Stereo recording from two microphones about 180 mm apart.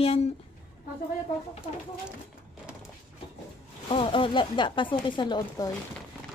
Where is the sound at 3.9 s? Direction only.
30° left (ahead or behind).